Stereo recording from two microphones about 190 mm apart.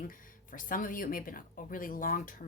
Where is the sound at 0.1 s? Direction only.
45° left (ahead or behind).